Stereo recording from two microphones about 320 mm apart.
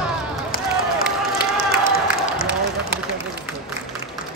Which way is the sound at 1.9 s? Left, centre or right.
Left.